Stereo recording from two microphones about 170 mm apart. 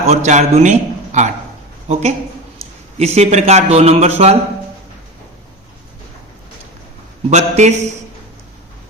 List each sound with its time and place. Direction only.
0.0 s a man's voice: 40° right (ahead or behind)
7.3 s speech: 40° right (ahead or behind)